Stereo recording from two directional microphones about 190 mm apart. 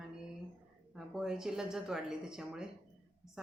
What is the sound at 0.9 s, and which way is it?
A woman's voice, 5° right (ahead or behind).